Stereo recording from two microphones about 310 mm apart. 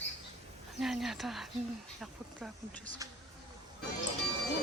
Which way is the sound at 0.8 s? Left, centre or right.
Centre.